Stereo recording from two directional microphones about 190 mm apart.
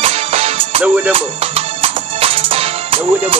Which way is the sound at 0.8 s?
5° right (ahead or behind).